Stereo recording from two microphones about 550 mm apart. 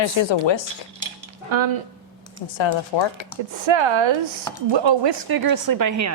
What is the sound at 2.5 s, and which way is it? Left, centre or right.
Speech, left.